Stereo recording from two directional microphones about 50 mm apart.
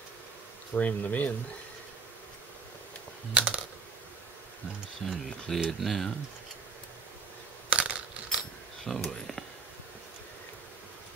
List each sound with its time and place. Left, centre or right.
0.7 s speech: left
3.3 s typing: right
5.0 s speech: centre
7.7 s a sound: right
8.9 s speech: centre